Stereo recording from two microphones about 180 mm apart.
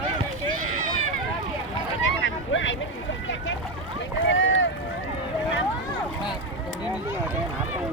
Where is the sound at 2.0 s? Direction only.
90° left.